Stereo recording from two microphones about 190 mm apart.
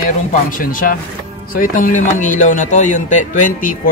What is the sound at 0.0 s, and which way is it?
A man's voice, 45° left (ahead or behind).